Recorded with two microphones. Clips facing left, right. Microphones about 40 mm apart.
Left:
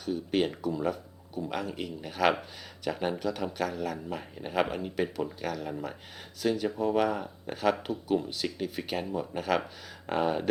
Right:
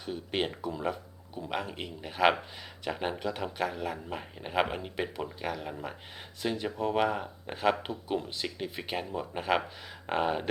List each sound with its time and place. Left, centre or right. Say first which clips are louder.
0.0 s speech: left 4 dB; right